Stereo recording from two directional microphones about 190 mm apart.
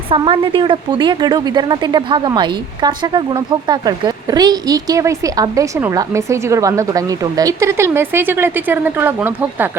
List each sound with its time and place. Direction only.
0.1 s a woman's voice: 25° right (ahead or behind); by 9.6 s 10° right (ahead or behind)